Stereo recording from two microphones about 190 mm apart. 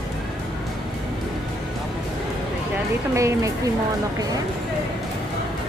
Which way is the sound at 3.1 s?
15° right (ahead or behind).